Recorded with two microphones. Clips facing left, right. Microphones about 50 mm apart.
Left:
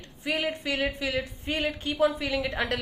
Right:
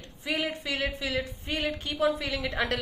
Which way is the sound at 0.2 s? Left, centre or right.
Left.